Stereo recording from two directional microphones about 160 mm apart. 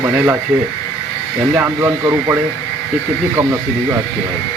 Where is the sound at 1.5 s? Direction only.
15° right (ahead or behind).